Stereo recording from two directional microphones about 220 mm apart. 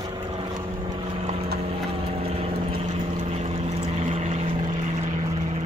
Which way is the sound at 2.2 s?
25° right (ahead or behind).